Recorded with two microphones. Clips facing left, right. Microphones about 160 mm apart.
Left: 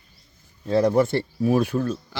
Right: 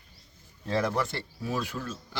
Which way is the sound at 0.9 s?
50° left (ahead or behind).